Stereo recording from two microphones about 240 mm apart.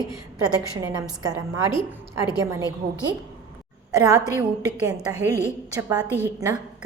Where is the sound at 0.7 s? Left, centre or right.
Centre.